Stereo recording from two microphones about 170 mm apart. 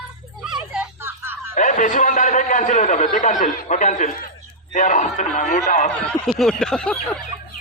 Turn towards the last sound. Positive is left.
turn(degrees=5)  # may be behind; listen again after turning